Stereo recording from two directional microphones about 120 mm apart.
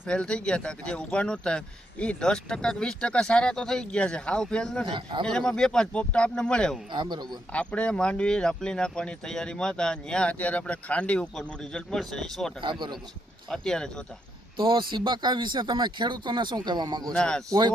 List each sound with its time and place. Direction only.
0.0 s speech: 10° left (ahead or behind)
4.9 s speech: 40° right (ahead or behind)
5.2 s speech: 5° left (ahead or behind)
6.9 s speech: 40° right (ahead or behind)
7.5 s speech: 10° left (ahead or behind)
14.6 s speech: 40° right (ahead or behind)
17.1 s speech: 5° left (ahead or behind)